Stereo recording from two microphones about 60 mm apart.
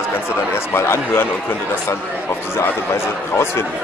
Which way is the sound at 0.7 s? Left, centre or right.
Left.